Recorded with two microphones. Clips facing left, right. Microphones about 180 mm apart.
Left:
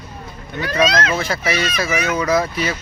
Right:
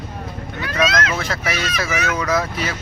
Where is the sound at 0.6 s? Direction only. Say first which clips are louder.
Left 3 dB; 35° left (ahead or behind).